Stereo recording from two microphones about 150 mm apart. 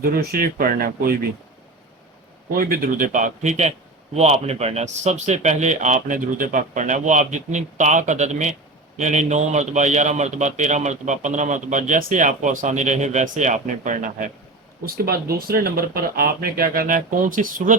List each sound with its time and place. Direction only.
0.0 s speech: 90° right
2.5 s speech: 75° right (ahead or behind)
14.8 s speech: 85° right; by 17.7 s 65° right (ahead or behind)